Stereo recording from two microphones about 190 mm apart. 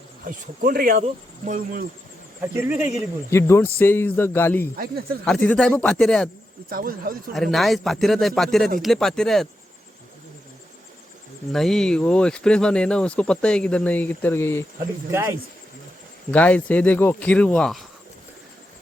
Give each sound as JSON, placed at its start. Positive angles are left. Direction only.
{"t": 0.3, "sound": "speech", "side_deg": -50}
{"t": 2.4, "sound": "speech", "side_deg": -10}
{"t": 3.2, "sound": "speech", "side_deg": 15}
{"t": 4.8, "sound": "speech", "side_deg": -50}
{"t": 5.2, "sound": "speech", "side_deg": 5}
{"t": 6.7, "sound": "speech", "side_deg": -50}
{"t": 7.3, "sound": "speech", "side_deg": 0}
{"t": 11.5, "sound": "speech", "side_deg": 0}
{"t": 15.1, "sound": "speech", "side_deg": -15}
{"t": 16.3, "sound": "speech", "side_deg": 10}